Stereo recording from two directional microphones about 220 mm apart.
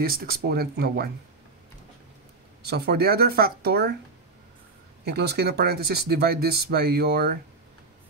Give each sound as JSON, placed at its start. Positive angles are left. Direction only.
{"t": 0.0, "sound": "speech", "side_deg": -45}
{"t": 2.6, "sound": "speech", "side_deg": -45}
{"t": 5.0, "sound": "speech", "side_deg": -45}